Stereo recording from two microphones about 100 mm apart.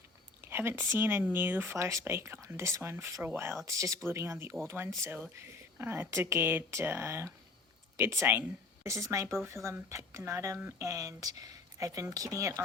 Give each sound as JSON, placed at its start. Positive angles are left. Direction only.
{"t": 0.4, "sound": "speech", "side_deg": -25}